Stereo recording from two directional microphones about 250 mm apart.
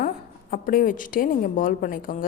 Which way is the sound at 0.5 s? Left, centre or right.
Left.